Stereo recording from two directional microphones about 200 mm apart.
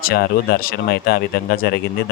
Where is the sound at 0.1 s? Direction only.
50° left (ahead or behind).